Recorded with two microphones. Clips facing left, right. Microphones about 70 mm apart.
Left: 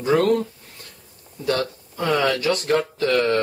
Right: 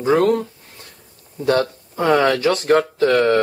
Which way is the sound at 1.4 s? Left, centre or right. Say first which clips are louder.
Right 5 dB; right.